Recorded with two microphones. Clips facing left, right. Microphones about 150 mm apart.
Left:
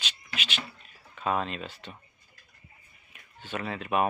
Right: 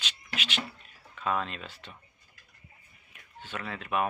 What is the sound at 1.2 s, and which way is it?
Speech, 15° left (ahead or behind).